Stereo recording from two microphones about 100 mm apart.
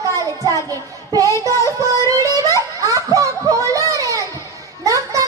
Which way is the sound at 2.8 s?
35° right (ahead or behind).